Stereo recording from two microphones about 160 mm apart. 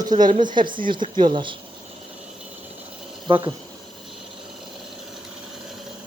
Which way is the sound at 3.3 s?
35° right (ahead or behind).